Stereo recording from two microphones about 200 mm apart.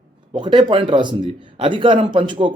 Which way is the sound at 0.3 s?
25° right (ahead or behind).